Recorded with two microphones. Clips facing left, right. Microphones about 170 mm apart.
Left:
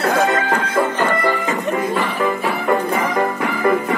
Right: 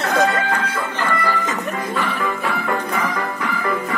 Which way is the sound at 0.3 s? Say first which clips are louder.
Left 3 dB; 30° left (ahead or behind).